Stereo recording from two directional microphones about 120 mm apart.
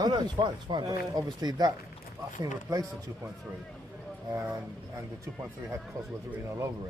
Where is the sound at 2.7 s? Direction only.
30° right (ahead or behind).